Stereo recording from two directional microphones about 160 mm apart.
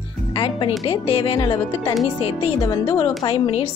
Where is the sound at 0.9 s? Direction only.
35° left (ahead or behind).